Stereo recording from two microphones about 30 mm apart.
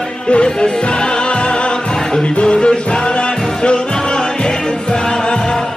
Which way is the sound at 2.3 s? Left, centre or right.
Left.